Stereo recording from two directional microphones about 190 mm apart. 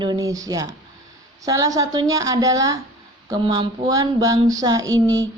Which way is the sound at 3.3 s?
25° right (ahead or behind).